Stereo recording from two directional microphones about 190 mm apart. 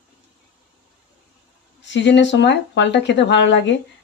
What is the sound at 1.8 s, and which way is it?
Speech, 70° left (ahead or behind).